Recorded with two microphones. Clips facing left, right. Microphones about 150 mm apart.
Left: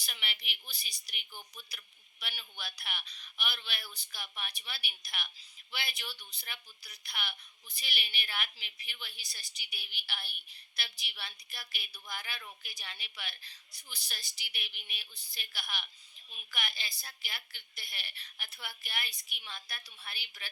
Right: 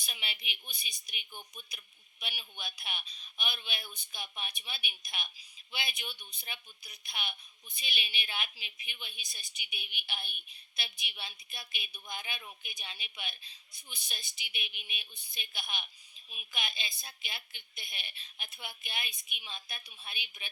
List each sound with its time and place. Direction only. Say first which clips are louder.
0.0 s speech: even; 20° right (ahead or behind)